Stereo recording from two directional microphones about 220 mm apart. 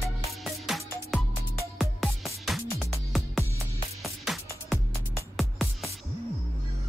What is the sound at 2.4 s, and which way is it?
Music, centre (ahead or behind).